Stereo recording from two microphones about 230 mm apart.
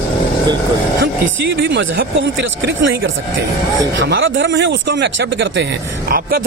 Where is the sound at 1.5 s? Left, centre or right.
Right.